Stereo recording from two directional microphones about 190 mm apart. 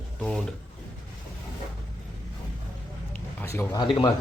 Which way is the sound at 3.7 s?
25° left (ahead or behind).